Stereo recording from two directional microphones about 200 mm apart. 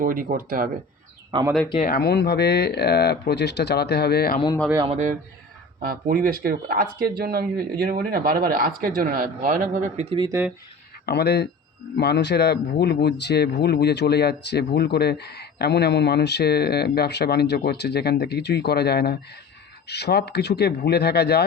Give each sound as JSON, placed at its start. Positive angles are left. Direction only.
{"t": 0.0, "sound": "speech", "side_deg": -45}
{"t": 1.3, "sound": "speech", "side_deg": -25}
{"t": 1.9, "sound": "speech", "side_deg": 55}
{"t": 4.9, "sound": "a man's voice", "side_deg": -35}
{"t": 5.8, "sound": "speech", "side_deg": -45}
{"t": 10.2, "sound": "speech", "side_deg": -15}
{"t": 11.0, "sound": "speech", "side_deg": 55}